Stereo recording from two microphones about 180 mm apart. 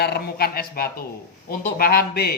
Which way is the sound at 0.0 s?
60° left (ahead or behind).